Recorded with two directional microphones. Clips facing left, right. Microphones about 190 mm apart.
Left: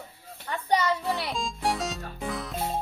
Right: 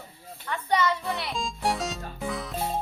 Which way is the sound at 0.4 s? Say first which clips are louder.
Even; 35° left (ahead or behind).